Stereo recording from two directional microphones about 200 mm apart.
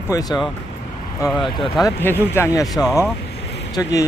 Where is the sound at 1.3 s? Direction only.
Centre (ahead or behind).